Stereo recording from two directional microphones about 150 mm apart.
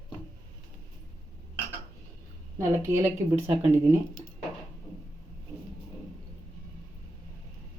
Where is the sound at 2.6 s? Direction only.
15° right (ahead or behind).